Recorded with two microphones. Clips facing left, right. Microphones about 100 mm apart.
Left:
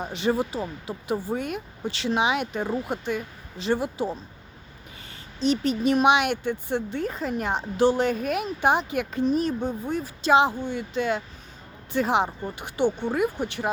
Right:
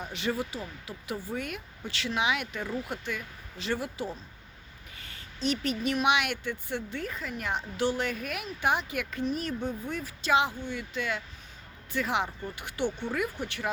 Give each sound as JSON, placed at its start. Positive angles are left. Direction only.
{"t": 0.0, "sound": "a woman's voice", "side_deg": 25}